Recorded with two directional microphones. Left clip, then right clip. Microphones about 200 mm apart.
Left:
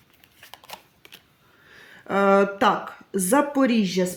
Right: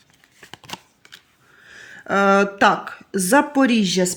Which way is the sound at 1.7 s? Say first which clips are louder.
Right 5 dB; 25° right (ahead or behind).